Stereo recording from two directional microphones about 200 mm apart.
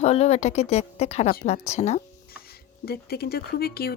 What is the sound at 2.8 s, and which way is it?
Speech, 50° left (ahead or behind).